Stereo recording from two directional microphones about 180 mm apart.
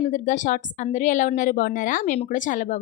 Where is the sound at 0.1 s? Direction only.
45° left (ahead or behind).